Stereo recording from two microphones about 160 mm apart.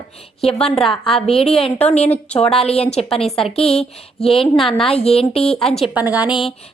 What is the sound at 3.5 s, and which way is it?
Speech, 40° left (ahead or behind).